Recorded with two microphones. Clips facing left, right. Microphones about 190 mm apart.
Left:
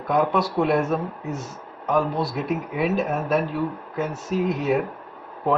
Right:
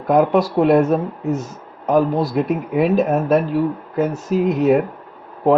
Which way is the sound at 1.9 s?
40° right (ahead or behind).